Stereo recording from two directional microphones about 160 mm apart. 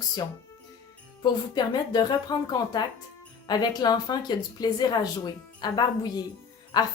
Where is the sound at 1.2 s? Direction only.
25° left (ahead or behind).